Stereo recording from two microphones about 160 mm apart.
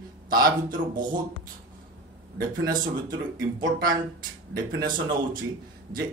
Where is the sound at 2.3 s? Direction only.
65° right (ahead or behind).